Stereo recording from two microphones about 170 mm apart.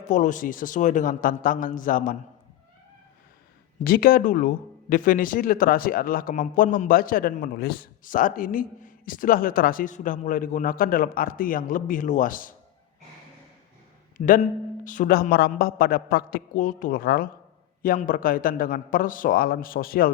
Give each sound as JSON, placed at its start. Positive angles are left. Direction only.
{"t": 0.0, "sound": "a man's voice", "side_deg": 45}
{"t": 3.8, "sound": "speech", "side_deg": 60}
{"t": 14.2, "sound": "a man's voice", "side_deg": 55}